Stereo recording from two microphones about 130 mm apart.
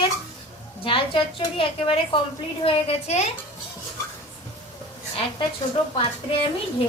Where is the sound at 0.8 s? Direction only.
45° left (ahead or behind).